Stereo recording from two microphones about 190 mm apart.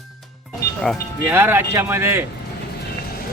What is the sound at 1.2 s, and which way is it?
A man's voice, 10° right (ahead or behind).